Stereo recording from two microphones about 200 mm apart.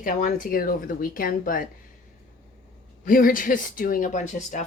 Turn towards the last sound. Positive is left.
turn(degrees=35)  # may be behind; listen again after turning